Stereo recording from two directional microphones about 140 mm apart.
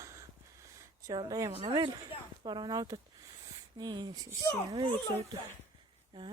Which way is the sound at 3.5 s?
30° right (ahead or behind).